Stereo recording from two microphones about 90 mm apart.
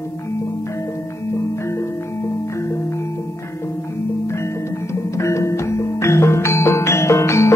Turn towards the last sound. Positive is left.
turn(degrees=30)  # may be behind; listen again after turning